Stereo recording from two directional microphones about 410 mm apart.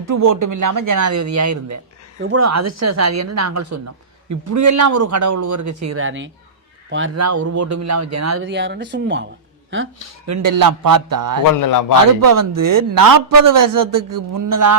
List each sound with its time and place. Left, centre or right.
0.0 s a man's voice: right
8.4 s speech: right
10.2 s a man's voice: right
11.6 s a man's voice: left
12.2 s a man's voice: right